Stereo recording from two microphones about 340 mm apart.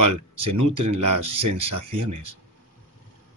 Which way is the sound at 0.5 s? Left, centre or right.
Right.